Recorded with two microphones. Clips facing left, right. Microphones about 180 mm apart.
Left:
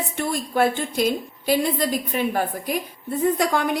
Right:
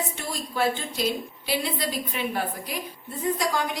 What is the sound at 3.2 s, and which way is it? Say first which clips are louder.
Speech: left 5 dB; 60° left (ahead or behind).